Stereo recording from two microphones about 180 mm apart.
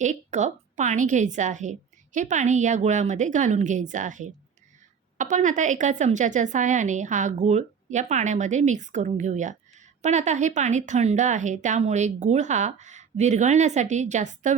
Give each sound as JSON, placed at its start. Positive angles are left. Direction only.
{"t": 0.0, "sound": "a woman's voice", "side_deg": -40}